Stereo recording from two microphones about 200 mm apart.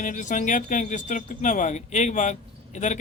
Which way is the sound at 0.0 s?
40° left (ahead or behind).